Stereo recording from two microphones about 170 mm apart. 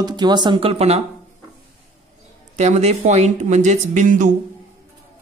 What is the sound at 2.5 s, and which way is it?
A woman's voice, 40° right (ahead or behind).